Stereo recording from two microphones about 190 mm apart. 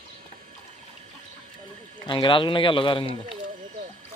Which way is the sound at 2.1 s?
25° left (ahead or behind).